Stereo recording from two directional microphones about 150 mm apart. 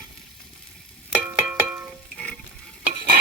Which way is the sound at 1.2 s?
10° right (ahead or behind).